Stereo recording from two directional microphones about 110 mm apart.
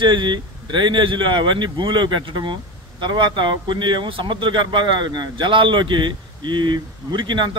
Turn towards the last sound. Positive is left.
turn(degrees=-45)  # may be behind; listen again after turning